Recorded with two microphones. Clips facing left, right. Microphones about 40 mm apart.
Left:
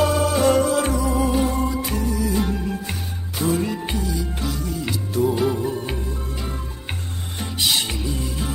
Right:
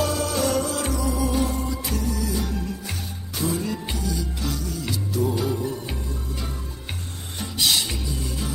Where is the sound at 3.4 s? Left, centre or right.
Left.